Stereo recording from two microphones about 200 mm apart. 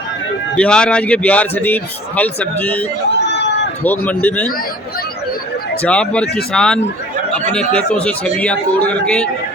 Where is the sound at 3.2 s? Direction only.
60° left (ahead or behind).